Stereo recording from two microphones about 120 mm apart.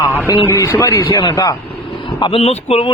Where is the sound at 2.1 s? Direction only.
45° left (ahead or behind).